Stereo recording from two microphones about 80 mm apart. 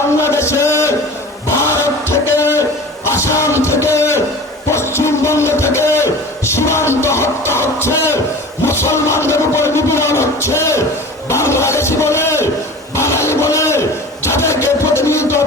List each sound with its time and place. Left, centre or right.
0.2 s music: left
2.6 s music: left
8.6 s a sound: left
14.4 s music: left